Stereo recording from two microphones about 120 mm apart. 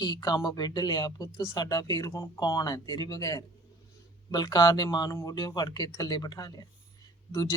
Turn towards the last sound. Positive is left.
turn(degrees=25)  # may be behind; listen again after turning